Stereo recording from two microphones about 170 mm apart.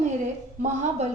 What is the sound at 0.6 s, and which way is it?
Speech, 45° right (ahead or behind).